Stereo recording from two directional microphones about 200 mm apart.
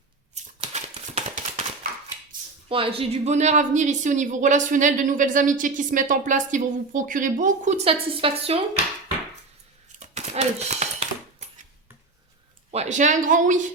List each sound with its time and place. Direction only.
0.3 s typewriter: 35° right (ahead or behind)
2.6 s a woman's voice: 25° right (ahead or behind)
10.0 s a sound: 35° right (ahead or behind)
12.7 s a woman's voice: 35° right (ahead or behind)